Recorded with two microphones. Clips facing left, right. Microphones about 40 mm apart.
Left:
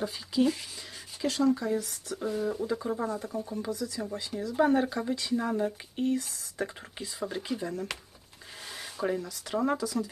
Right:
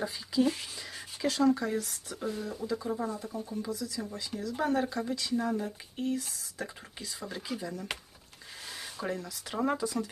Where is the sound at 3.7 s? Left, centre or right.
Left.